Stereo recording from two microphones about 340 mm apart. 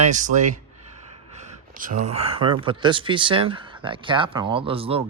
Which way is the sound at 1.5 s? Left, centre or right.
Right.